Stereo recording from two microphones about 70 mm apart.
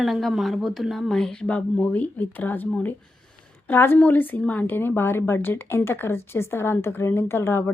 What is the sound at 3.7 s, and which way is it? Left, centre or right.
A woman's voice, left.